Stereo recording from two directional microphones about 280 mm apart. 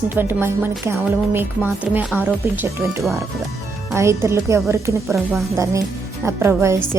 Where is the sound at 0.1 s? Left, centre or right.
Centre.